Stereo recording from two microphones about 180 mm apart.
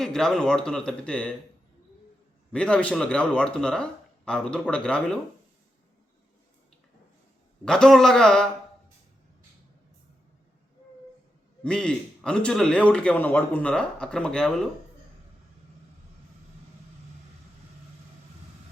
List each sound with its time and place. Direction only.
0.0 s a man's voice: centre (ahead or behind)
2.5 s a man's voice: 5° left (ahead or behind)
7.6 s a man's voice: 5° left (ahead or behind)
11.6 s a man's voice: 5° left (ahead or behind)